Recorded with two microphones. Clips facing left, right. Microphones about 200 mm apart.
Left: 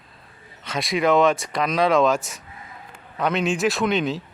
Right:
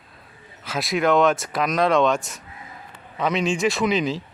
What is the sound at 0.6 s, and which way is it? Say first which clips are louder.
A man's voice: even; centre (ahead or behind).